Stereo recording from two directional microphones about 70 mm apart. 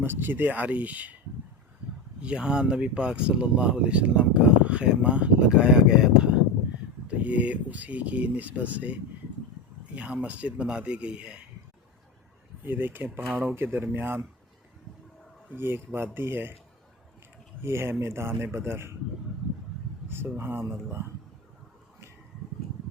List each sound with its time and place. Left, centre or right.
0.0 s speech: right
2.2 s speech: centre
12.6 s speech: right
15.5 s speech: right
17.6 s speech: right
20.1 s speech: right